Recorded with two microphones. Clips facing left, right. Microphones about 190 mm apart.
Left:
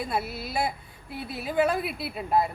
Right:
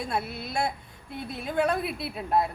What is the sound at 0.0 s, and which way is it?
A woman's voice, 5° left (ahead or behind).